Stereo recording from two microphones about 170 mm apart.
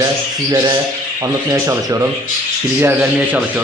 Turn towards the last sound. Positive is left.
turn(degrees=-10)  # may be behind; listen again after turning